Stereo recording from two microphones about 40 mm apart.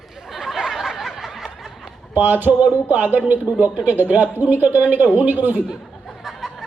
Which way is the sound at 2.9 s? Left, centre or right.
Right.